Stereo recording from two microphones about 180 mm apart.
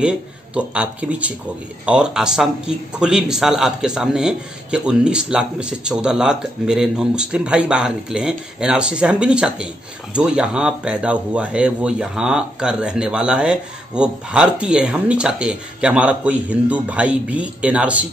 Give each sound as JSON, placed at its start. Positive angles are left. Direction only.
{"t": 0.6, "sound": "speech", "side_deg": -5}